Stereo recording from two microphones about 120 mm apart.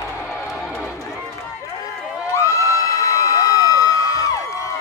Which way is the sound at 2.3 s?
25° left (ahead or behind).